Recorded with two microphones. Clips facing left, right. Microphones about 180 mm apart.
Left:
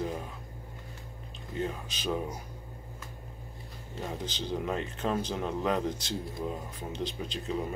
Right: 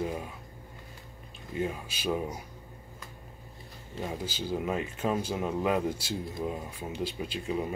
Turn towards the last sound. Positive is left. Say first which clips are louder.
# right 1 dB
turn(degrees=-10)  # may be behind; listen again after turning